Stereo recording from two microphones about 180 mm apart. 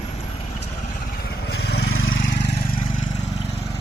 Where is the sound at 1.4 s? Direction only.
65° left (ahead or behind).